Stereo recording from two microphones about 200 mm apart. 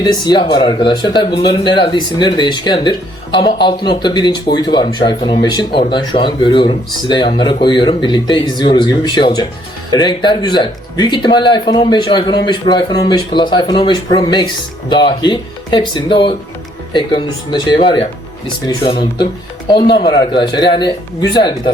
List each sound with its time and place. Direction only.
0.0 s speech: 20° left (ahead or behind)